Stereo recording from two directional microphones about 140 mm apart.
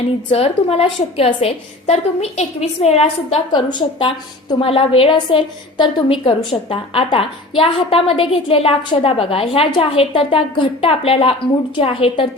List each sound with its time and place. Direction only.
0.3 s a woman's voice: 45° left (ahead or behind)
3.5 s a woman's voice: 30° left (ahead or behind)